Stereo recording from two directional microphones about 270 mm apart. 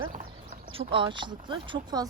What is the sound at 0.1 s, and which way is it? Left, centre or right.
Speech, right.